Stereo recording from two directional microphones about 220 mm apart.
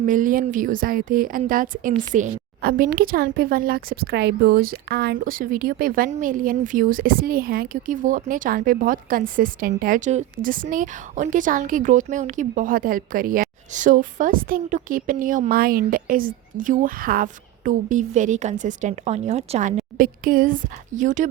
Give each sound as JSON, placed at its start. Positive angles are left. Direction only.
{"t": 0.0, "sound": "a woman's voice", "side_deg": -35}